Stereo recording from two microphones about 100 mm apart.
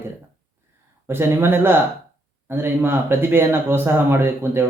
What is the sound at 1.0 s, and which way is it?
Speech, 25° right (ahead or behind).